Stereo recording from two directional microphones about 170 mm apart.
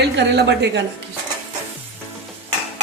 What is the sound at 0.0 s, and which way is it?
Speech, 85° right.